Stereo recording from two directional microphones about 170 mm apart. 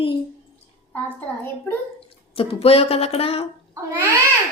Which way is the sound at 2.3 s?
35° left (ahead or behind).